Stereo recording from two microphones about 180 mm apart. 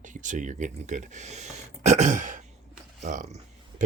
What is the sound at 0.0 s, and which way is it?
Speech, 45° right (ahead or behind).